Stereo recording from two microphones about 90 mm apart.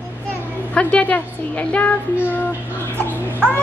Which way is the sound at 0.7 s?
15° left (ahead or behind).